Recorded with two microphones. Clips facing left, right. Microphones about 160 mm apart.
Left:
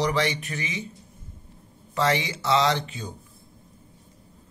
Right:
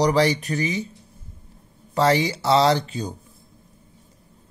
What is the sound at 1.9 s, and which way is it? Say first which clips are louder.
Speech: right 5 dB; 35° right (ahead or behind).